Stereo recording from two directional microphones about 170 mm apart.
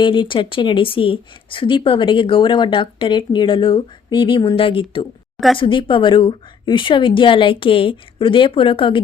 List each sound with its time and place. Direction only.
0.0 s speech: 30° left (ahead or behind)